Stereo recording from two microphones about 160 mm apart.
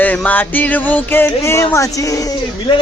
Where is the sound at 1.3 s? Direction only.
15° left (ahead or behind).